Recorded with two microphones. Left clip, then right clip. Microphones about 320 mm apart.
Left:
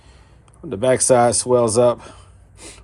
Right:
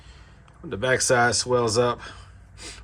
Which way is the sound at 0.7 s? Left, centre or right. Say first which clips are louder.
Left 6 dB; centre.